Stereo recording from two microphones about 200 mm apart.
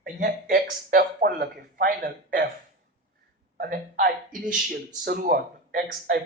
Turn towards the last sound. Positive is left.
turn(degrees=-45)  # may be behind; listen again after turning